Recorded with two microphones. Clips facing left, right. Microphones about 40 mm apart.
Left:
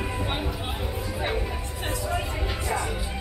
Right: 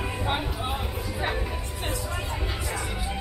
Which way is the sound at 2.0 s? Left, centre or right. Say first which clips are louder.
Left 3 dB; centre.